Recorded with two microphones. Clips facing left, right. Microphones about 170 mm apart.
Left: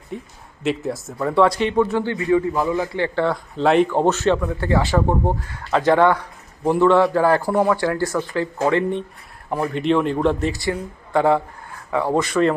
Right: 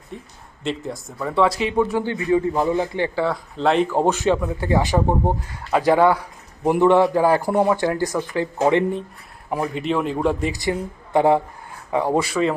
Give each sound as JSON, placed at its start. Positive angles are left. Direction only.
{"t": 0.1, "sound": "a man's voice", "side_deg": 0}
{"t": 2.1, "sound": "a man's voice", "side_deg": -25}
{"t": 3.2, "sound": "a man's voice", "side_deg": 0}
{"t": 9.5, "sound": "a man's voice", "side_deg": -5}